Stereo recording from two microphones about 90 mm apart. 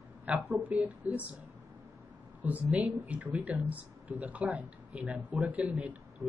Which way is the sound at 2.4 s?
15° right (ahead or behind).